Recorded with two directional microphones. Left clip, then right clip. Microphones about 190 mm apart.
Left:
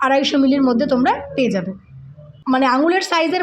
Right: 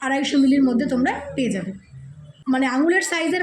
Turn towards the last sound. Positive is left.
turn(degrees=30)  # may be behind; listen again after turning